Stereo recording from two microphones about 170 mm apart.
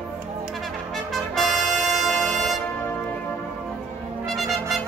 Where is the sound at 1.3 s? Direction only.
5° left (ahead or behind).